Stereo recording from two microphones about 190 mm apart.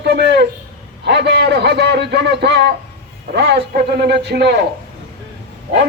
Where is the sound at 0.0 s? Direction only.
60° right (ahead or behind).